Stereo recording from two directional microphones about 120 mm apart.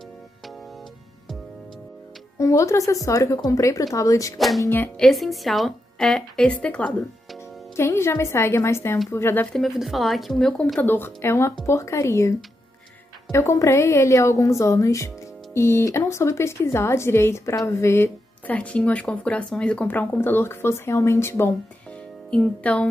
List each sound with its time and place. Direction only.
2.3 s speech: 25° left (ahead or behind)
4.4 s a woman's voice: centre (ahead or behind)
7.7 s speech: 20° left (ahead or behind)
9.6 s a woman's voice: centre (ahead or behind)
10.8 s speech: 15° left (ahead or behind)
22.3 s speech: 10° left (ahead or behind)